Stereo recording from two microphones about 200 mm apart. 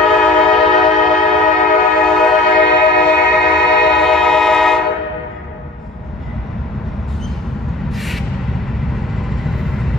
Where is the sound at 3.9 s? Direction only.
5° left (ahead or behind).